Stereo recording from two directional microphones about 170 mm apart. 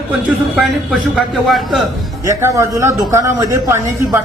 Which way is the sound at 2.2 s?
15° right (ahead or behind).